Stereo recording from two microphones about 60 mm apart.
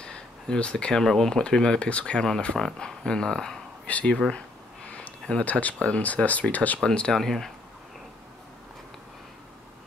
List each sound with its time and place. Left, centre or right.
0.0 s a sound: centre
1.0 s speech: centre
3.8 s speech: left
4.8 s a sound: left
5.4 s speech: left
6.8 s speech: centre